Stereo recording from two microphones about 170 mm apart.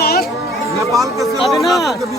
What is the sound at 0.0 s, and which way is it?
Children playing, 65° left (ahead or behind).